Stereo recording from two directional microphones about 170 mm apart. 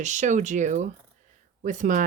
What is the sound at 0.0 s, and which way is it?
Speech, 45° right (ahead or behind).